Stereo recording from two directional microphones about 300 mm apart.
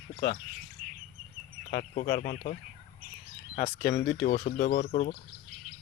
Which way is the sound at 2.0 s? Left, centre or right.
Left.